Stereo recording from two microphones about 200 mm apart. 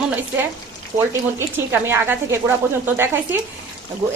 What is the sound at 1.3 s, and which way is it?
A woman's voice, 10° right (ahead or behind).